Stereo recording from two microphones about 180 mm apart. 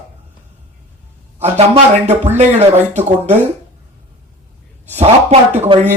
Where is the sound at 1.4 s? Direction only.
35° right (ahead or behind).